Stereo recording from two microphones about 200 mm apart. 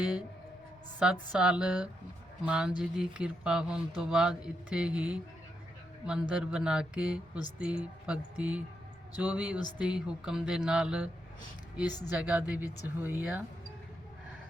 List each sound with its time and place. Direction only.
0.0 s speech: 5° right (ahead or behind)
1.3 s speech: 5° right (ahead or behind)
9.6 s speech: 20° left (ahead or behind)
9.8 s speech: 5° right (ahead or behind)
11.9 s speech: 20° left (ahead or behind)
12.1 s speech: 10° right (ahead or behind)